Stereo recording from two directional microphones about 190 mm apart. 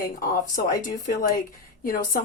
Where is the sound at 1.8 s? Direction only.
45° left (ahead or behind).